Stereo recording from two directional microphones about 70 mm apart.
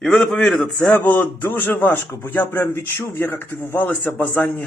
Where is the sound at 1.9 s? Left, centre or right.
Left.